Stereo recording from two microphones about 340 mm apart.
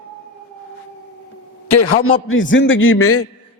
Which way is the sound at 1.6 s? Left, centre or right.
Left.